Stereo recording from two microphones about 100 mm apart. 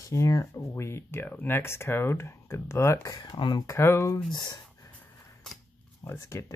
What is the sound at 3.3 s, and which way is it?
Speech, 55° left (ahead or behind).